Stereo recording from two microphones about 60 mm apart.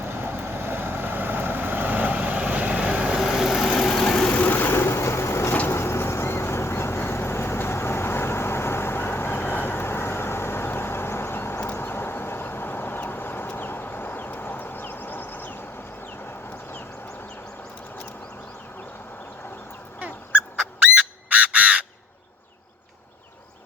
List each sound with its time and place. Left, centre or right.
0.0 s vehicle: right; by 3.6 s centre
3.6 s vehicle: centre
4.3 s vehicle: left
11.6 s horse: left
20.9 s frog: right